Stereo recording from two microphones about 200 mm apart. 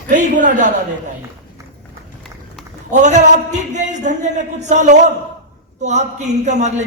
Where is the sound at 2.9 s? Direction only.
35° right (ahead or behind).